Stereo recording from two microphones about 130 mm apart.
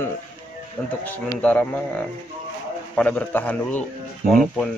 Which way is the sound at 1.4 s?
10° left (ahead or behind).